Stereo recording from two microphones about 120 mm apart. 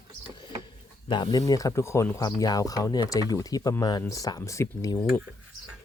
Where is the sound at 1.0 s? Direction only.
40° left (ahead or behind).